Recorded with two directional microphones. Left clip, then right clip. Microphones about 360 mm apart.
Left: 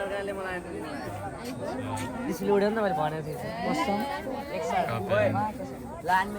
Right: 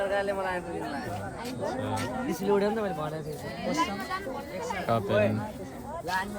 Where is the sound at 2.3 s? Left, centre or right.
Centre.